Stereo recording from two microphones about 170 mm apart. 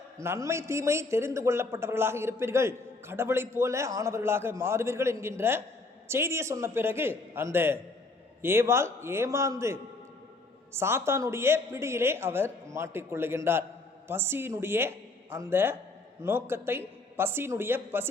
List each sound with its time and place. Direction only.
0.2 s a man's voice: 15° right (ahead or behind)